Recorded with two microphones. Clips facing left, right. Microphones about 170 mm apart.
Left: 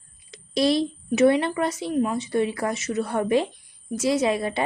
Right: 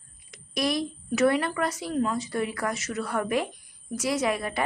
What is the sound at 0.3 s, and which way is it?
Speech, 30° left (ahead or behind).